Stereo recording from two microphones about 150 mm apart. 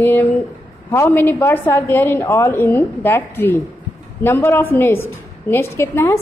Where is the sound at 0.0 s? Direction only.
15° left (ahead or behind).